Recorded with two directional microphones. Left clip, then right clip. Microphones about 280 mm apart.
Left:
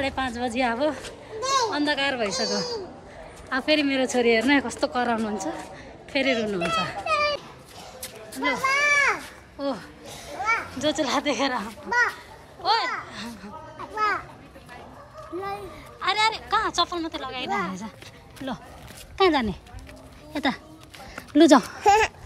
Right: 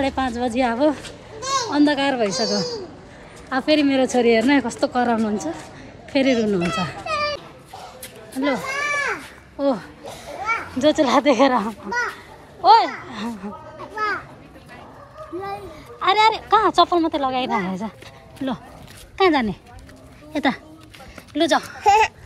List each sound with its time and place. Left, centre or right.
0.0 s a child's voice: centre
1.4 s a sound: centre
1.7 s a child's voice: centre
7.1 s children playing: centre
8.0 s a sound: centre
9.6 s a child's voice: centre
13.9 s children playing: centre
15.4 s a child's voice: centre
21.3 s speech: left